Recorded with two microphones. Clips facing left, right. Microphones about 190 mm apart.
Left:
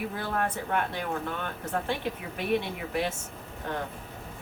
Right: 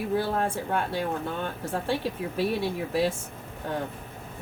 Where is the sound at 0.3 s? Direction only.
30° right (ahead or behind).